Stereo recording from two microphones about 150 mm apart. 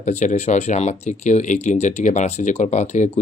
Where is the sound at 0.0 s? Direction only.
50° left (ahead or behind).